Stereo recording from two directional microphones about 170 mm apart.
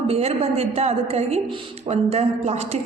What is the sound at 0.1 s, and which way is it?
A woman's voice, 35° right (ahead or behind).